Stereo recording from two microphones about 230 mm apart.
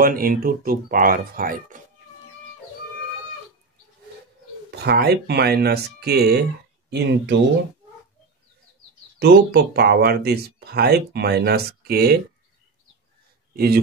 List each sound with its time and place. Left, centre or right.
0.0 s speech: right
4.6 s speech: right
9.2 s speech: right